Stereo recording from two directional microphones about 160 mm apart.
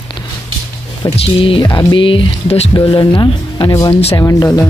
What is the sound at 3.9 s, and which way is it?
Speech, 40° left (ahead or behind).